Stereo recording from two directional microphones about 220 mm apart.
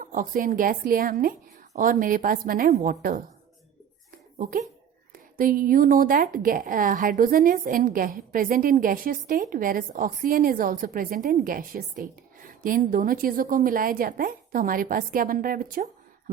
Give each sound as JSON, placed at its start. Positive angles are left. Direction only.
{"t": 0.0, "sound": "speech", "side_deg": -40}
{"t": 5.1, "sound": "speech", "side_deg": -40}